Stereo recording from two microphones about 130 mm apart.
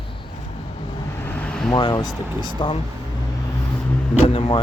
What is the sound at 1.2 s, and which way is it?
Vehicle, 15° left (ahead or behind).